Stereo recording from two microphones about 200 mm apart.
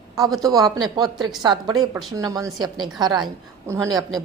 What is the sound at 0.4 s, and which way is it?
A woman's voice, 20° right (ahead or behind).